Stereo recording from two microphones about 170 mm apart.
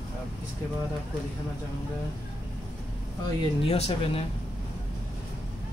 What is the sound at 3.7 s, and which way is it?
Speech, 35° left (ahead or behind).